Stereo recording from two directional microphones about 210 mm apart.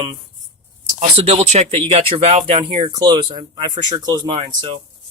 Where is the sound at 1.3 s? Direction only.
30° right (ahead or behind).